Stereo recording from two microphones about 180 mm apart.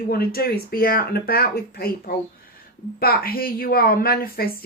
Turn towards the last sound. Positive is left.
turn(degrees=55)  # may be behind; listen again after turning